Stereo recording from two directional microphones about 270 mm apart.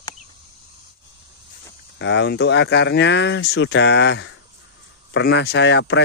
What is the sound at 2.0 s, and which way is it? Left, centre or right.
Speech, left.